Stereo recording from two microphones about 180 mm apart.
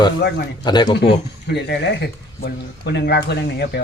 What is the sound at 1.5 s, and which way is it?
Speech, 70° left (ahead or behind).